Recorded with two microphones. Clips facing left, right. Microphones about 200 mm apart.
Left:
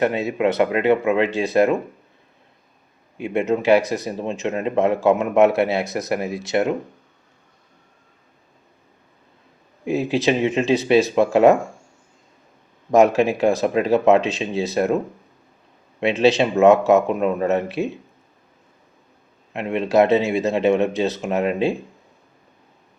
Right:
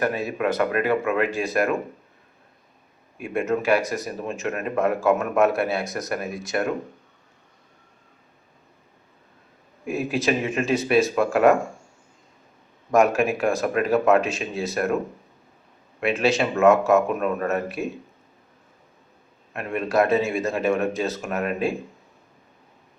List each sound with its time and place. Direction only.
0.0 s speech: 25° left (ahead or behind)
3.2 s speech: 20° left (ahead or behind)
9.8 s speech: 25° left (ahead or behind)
12.9 s speech: 20° left (ahead or behind)
16.0 s speech: 25° left (ahead or behind)
19.5 s speech: 25° left (ahead or behind)